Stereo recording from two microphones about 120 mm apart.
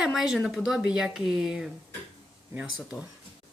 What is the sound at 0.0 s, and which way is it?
A woman's voice, 5° right (ahead or behind).